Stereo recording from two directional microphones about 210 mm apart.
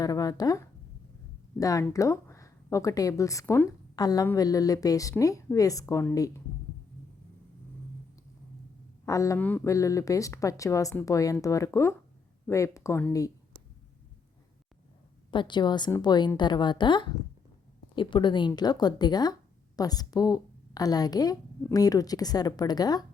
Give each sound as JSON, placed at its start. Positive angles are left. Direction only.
{"t": 0.0, "sound": "speech", "side_deg": 15}
{"t": 9.0, "sound": "speech", "side_deg": 15}
{"t": 15.3, "sound": "speech", "side_deg": 20}